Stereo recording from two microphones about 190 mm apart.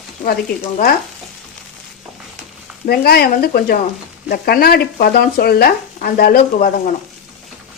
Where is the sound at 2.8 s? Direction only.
55° left (ahead or behind).